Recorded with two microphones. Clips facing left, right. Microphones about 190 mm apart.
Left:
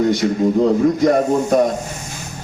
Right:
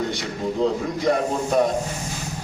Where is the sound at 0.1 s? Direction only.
45° left (ahead or behind).